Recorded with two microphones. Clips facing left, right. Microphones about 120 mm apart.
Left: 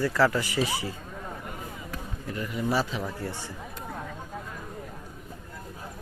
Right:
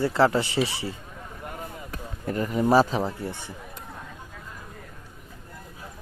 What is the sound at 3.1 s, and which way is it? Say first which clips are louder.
Speech: right 2 dB; 20° right (ahead or behind).